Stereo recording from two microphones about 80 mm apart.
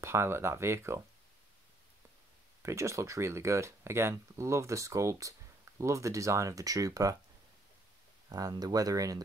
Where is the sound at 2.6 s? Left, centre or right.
Right.